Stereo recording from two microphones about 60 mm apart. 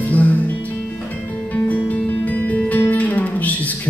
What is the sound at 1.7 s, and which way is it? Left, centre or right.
Music, left.